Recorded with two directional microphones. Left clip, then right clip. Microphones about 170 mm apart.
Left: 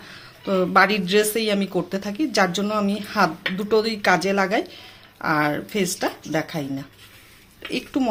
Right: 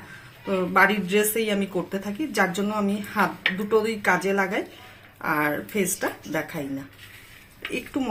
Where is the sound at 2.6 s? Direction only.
60° left (ahead or behind).